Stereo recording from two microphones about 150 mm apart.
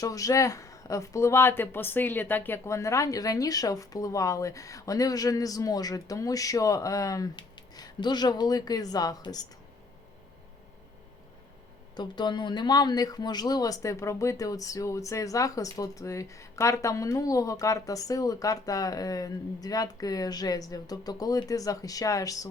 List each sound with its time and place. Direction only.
0.0 s speech: 20° left (ahead or behind)
11.9 s speech: 30° left (ahead or behind)